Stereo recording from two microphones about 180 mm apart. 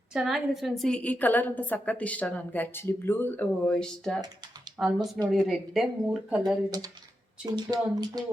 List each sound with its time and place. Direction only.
0.1 s a woman's voice: centre (ahead or behind)
6.7 s speech: 20° right (ahead or behind)